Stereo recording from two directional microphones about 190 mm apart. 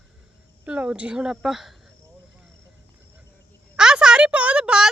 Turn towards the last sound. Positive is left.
turn(degrees=-5)  # may be behind; listen again after turning